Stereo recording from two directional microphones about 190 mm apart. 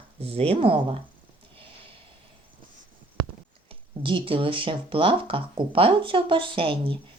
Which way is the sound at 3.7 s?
25° right (ahead or behind).